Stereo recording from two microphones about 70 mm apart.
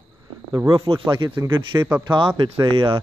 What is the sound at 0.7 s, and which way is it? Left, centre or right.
Speech, right.